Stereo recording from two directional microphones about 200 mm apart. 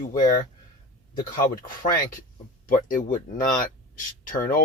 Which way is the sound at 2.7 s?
40° left (ahead or behind).